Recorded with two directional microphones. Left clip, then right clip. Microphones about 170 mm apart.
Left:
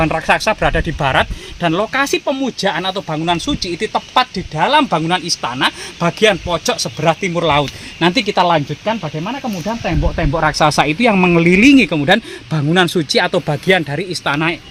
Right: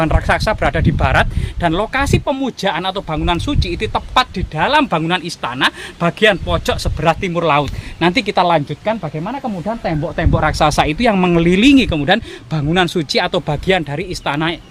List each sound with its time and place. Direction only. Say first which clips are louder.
0.0 s speech: left 2 dB; 45° left (ahead or behind)